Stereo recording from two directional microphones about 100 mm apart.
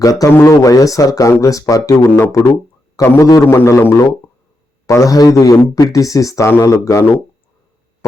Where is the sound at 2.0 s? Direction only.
25° left (ahead or behind).